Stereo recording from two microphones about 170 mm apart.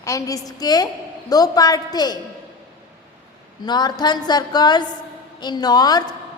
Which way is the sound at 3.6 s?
25° left (ahead or behind).